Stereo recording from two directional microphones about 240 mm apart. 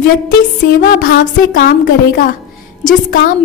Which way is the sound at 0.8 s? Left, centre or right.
Left.